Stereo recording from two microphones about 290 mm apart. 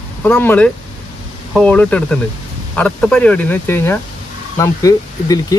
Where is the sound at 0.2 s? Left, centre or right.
Centre.